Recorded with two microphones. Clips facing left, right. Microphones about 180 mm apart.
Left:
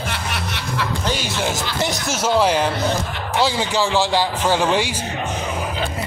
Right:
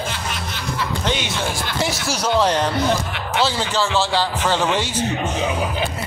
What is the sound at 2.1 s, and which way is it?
Speech, 5° left (ahead or behind).